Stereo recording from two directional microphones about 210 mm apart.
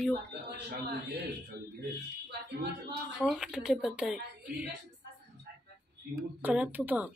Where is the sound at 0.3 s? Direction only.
50° right (ahead or behind).